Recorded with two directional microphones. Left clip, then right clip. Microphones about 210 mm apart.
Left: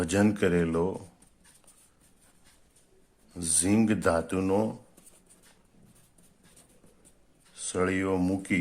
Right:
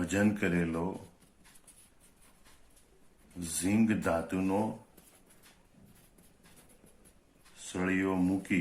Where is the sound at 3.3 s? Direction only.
50° left (ahead or behind).